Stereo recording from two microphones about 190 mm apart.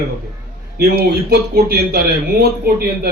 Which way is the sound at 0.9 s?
50° right (ahead or behind).